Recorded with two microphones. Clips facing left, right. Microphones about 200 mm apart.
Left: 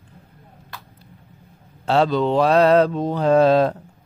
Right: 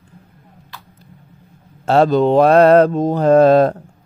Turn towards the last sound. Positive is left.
turn(degrees=-50)  # may be behind; listen again after turning